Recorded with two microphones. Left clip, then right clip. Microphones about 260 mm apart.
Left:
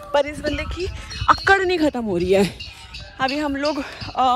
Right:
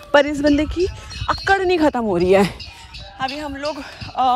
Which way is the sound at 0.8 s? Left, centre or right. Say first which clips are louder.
Right 1 dB; centre.